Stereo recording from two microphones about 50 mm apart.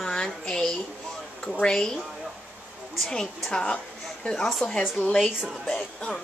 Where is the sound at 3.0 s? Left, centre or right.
Centre.